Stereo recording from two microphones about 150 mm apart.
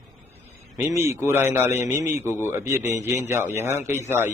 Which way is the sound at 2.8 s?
50° left (ahead or behind).